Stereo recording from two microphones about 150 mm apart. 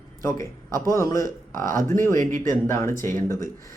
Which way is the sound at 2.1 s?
55° right (ahead or behind).